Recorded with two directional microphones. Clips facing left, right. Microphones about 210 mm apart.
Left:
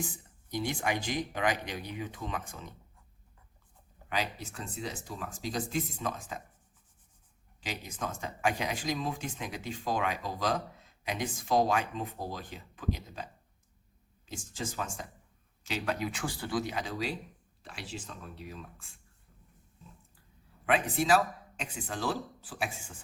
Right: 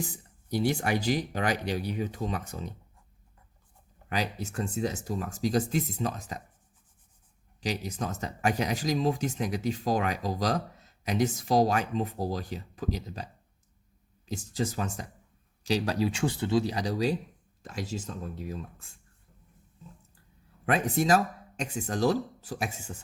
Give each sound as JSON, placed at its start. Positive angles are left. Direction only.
{"t": 0.6, "sound": "speech", "side_deg": -40}
{"t": 4.1, "sound": "speech", "side_deg": -40}
{"t": 7.6, "sound": "speech", "side_deg": -40}
{"t": 14.3, "sound": "speech", "side_deg": -40}
{"t": 20.7, "sound": "speech", "side_deg": -40}